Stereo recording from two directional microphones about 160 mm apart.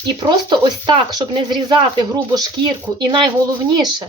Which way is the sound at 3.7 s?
25° right (ahead or behind).